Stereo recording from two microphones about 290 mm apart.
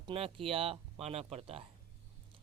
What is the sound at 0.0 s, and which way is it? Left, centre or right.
Speech, centre.